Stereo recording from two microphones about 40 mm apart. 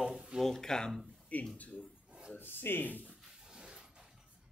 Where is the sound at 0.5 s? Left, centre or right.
Centre.